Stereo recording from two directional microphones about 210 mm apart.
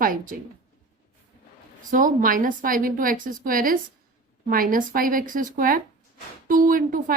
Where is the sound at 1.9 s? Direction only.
40° right (ahead or behind).